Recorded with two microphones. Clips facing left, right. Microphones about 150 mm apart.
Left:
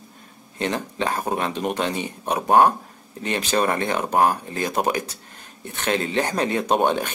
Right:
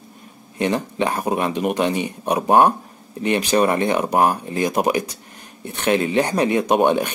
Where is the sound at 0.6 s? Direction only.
15° right (ahead or behind).